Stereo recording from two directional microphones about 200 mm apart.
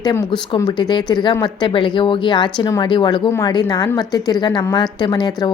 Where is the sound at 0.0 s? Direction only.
15° left (ahead or behind).